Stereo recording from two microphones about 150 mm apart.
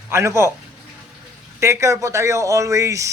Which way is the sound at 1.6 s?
20° right (ahead or behind).